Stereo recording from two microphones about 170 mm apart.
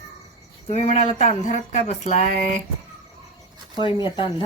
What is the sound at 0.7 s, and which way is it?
Speech, 45° left (ahead or behind).